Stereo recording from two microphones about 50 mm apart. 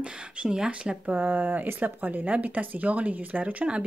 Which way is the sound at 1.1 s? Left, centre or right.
Right.